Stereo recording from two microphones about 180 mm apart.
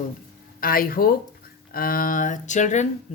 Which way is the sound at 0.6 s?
55° left (ahead or behind).